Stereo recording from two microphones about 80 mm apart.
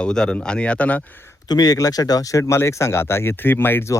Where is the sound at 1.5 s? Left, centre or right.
Left.